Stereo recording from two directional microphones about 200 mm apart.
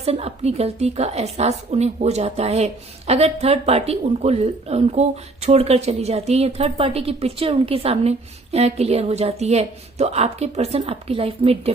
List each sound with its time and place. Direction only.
0.0 s a woman's voice: 30° right (ahead or behind)